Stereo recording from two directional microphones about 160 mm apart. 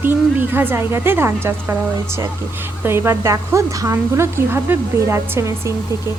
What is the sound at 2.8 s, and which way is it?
Speech, 15° right (ahead or behind).